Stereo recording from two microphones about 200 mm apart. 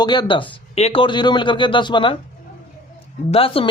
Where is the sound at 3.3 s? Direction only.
25° left (ahead or behind).